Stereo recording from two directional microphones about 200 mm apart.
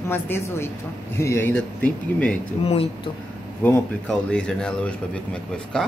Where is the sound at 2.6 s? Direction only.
30° left (ahead or behind).